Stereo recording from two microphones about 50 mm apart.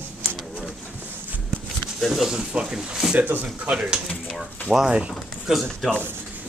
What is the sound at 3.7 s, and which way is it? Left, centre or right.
Speech, centre.